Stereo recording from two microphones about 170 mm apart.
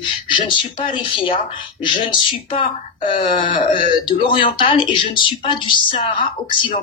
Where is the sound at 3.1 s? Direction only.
30° left (ahead or behind).